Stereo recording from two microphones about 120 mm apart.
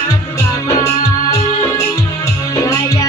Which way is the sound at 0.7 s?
25° left (ahead or behind).